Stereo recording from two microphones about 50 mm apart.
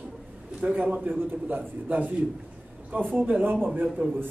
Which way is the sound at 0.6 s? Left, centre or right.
Right.